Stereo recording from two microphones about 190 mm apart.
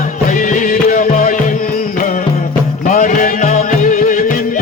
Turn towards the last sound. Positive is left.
turn(degrees=45)  # may be behind; listen again after turning